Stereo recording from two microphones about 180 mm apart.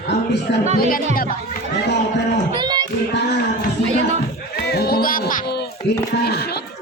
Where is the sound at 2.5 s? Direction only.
25° right (ahead or behind).